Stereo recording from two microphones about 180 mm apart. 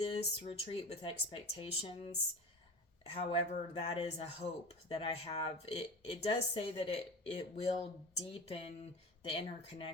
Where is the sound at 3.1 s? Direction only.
30° left (ahead or behind).